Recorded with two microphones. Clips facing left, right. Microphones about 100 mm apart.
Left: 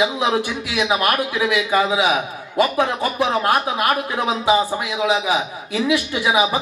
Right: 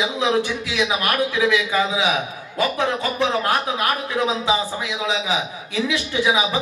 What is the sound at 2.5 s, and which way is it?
Speech, 15° left (ahead or behind).